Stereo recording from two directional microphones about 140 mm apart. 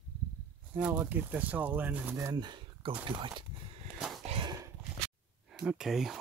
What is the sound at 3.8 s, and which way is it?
Livestock, 5° right (ahead or behind).